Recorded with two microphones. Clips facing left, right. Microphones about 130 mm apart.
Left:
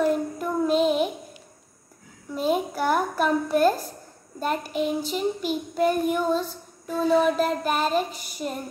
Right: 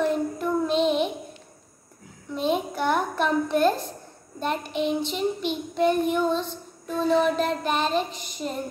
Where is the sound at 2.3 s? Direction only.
5° left (ahead or behind).